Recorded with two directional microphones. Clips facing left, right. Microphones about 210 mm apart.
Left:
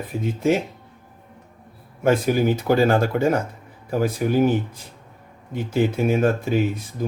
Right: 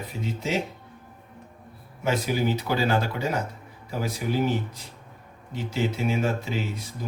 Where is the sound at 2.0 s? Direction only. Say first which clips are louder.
Left 7 dB; 50° left (ahead or behind).